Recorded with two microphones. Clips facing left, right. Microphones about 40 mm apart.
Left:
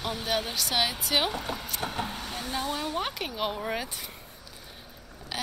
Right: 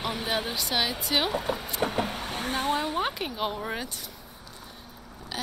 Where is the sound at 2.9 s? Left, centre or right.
Centre.